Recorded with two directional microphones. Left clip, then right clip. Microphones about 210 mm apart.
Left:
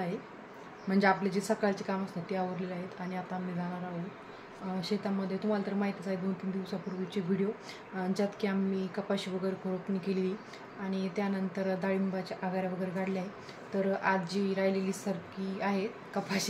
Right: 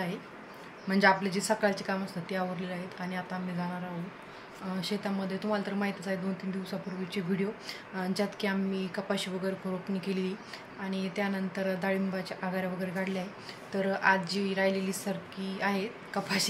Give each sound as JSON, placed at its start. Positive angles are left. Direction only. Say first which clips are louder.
{"t": 0.8, "sound": "a woman's voice", "louder": "right 3 dB", "side_deg": 0}
{"t": 4.7, "sound": "a woman's voice", "louder": "even", "side_deg": 0}